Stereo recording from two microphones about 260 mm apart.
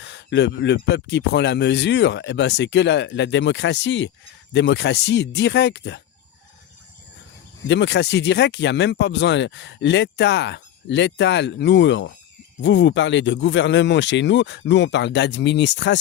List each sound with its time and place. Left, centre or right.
0.0 s speech: left
7.7 s speech: left